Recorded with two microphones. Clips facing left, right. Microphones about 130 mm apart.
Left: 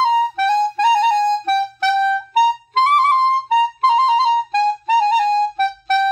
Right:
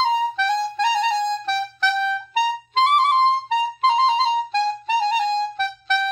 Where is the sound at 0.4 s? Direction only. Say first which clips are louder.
Left 5 dB; 55° left (ahead or behind).